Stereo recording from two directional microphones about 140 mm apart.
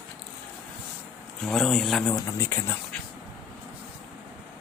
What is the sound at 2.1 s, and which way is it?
Speech, 20° left (ahead or behind).